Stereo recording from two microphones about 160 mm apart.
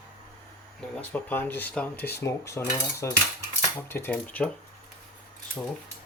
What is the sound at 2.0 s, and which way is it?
Speech, 85° left.